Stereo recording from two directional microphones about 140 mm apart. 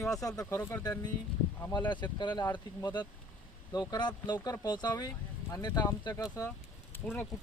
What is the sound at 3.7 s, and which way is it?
Speech, 30° left (ahead or behind).